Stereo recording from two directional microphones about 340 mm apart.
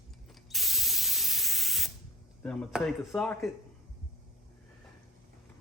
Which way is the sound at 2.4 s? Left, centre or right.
Centre.